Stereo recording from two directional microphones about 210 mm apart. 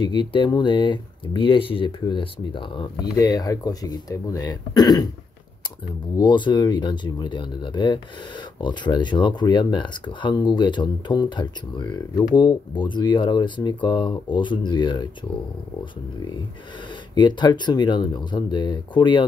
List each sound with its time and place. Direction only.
0.0 s speech: 20° left (ahead or behind)
6.1 s speech: 20° left (ahead or behind)
17.1 s speech: 20° left (ahead or behind)